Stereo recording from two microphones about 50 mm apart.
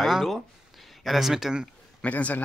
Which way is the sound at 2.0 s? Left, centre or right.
Left.